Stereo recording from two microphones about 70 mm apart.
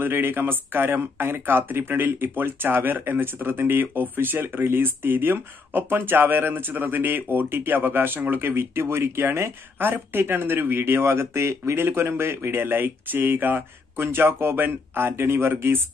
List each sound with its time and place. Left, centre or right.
0.0 s speech: right